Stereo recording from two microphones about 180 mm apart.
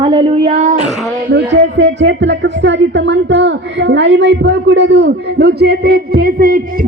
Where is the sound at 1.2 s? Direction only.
75° right (ahead or behind).